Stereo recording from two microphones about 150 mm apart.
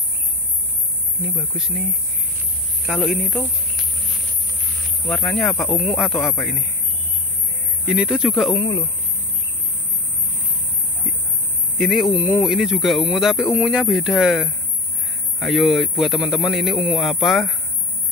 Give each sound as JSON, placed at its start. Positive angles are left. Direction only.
{"t": 3.0, "sound": "speech", "side_deg": 0}
{"t": 5.0, "sound": "speech", "side_deg": 10}
{"t": 7.9, "sound": "speech", "side_deg": -5}
{"t": 8.5, "sound": "speech", "side_deg": 25}
{"t": 11.1, "sound": "a sound", "side_deg": 0}
{"t": 11.8, "sound": "speech", "side_deg": 0}